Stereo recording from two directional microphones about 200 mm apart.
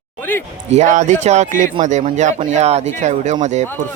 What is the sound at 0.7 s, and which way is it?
Speech, 35° right (ahead or behind).